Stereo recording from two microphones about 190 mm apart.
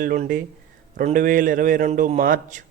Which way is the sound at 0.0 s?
45° right (ahead or behind).